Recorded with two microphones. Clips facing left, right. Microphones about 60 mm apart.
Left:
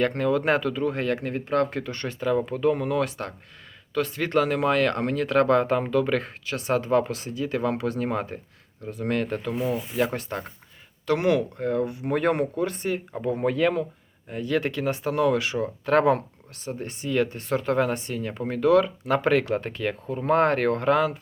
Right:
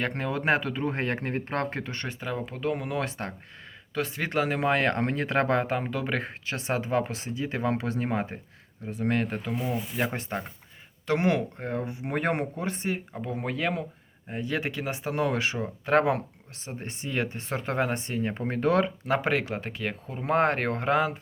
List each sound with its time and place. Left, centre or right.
0.0 s speech: centre
0.8 s speech: right
2.2 s speech: centre
3.0 s speech: right
3.9 s speech: centre
6.4 s speech: right
11.0 s speech: right
13.2 s speech: centre
14.3 s speech: right
15.5 s speech: centre
16.6 s speech: right
19.0 s speech: centre